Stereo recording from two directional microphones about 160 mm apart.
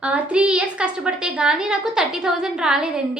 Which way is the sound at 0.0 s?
10° right (ahead or behind).